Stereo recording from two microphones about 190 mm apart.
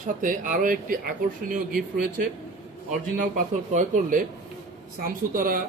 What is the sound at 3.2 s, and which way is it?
Speech, 40° right (ahead or behind).